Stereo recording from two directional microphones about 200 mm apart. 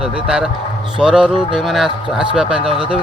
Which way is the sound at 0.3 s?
5° right (ahead or behind).